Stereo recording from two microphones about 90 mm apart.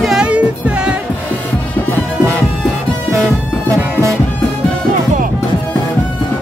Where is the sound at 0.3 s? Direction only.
15° right (ahead or behind).